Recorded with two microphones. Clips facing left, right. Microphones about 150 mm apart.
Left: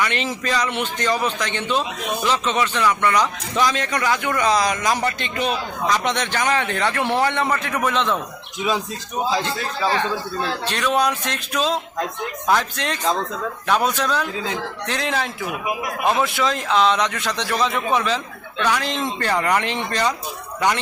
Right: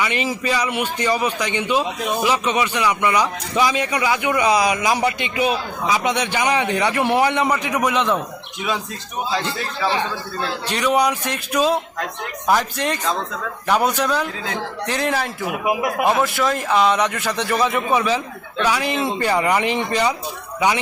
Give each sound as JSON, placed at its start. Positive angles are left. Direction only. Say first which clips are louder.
{"t": 0.0, "sound": "a man's voice", "louder": "right 1 dB", "side_deg": -10}
{"t": 10.7, "sound": "a man's voice", "louder": "right 3 dB", "side_deg": -10}
{"t": 13.7, "sound": "a man's voice", "louder": "right 2 dB", "side_deg": -10}
{"t": 15.6, "sound": "a man's voice", "louder": "right 8 dB", "side_deg": -65}
{"t": 16.2, "sound": "a man's voice", "louder": "right 2 dB", "side_deg": 0}